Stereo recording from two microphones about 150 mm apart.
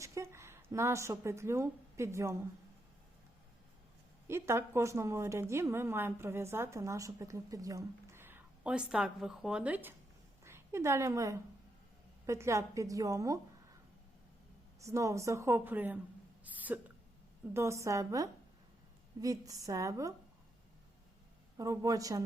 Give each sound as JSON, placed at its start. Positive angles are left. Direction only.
{"t": 0.0, "sound": "speech", "side_deg": -20}
{"t": 4.3, "sound": "a woman's voice", "side_deg": -15}
{"t": 14.8, "sound": "a woman's voice", "side_deg": -20}
{"t": 16.4, "sound": "hiccup", "side_deg": -10}
{"t": 17.5, "sound": "a woman's voice", "side_deg": -20}
{"t": 21.6, "sound": "a woman's voice", "side_deg": -20}